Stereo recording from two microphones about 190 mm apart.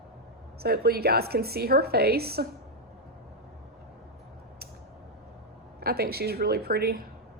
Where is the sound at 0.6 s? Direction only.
55° right (ahead or behind).